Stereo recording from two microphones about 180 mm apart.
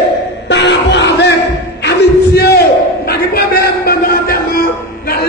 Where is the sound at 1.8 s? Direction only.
65° left (ahead or behind).